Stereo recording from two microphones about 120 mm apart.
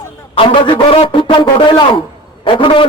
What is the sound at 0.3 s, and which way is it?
Speech, 50° left (ahead or behind).